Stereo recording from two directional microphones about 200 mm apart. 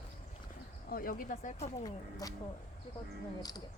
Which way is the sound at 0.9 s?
45° left (ahead or behind).